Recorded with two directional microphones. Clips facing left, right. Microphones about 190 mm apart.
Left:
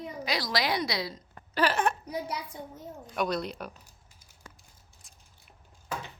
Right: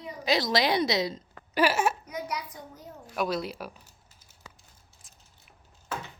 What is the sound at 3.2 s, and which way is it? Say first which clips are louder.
Speech: right 1 dB; 5° right (ahead or behind).